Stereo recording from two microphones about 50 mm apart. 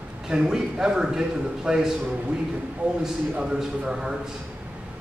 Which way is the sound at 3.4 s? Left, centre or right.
Centre.